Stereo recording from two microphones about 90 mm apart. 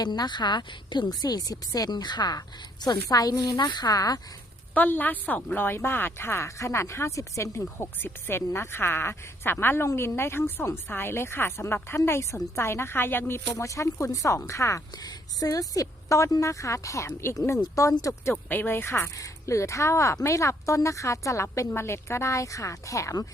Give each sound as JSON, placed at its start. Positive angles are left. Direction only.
{"t": 0.0, "sound": "a woman's voice", "side_deg": 50}
{"t": 4.7, "sound": "a woman's voice", "side_deg": 20}
{"t": 18.4, "sound": "speech", "side_deg": 20}